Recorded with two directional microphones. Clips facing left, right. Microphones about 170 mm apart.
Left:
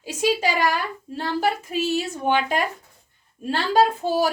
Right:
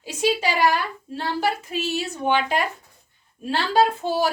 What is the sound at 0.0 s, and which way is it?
A woman's voice, 45° left (ahead or behind).